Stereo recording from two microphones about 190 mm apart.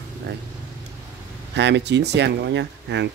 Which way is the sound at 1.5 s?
65° right (ahead or behind).